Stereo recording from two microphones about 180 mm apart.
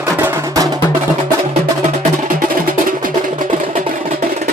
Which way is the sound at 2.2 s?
50° right (ahead or behind).